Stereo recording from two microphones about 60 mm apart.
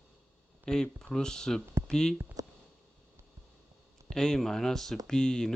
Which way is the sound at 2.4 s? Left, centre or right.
Right.